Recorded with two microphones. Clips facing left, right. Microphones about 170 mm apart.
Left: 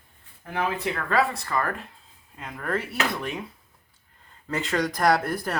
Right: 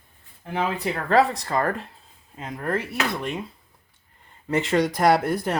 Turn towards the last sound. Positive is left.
turn(degrees=-20)  # may be behind; listen again after turning